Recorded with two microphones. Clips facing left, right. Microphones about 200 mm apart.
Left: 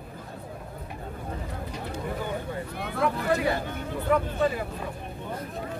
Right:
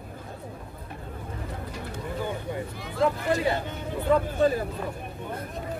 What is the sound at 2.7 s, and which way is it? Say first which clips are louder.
Vehicle: left 4 dB; 60° left (ahead or behind).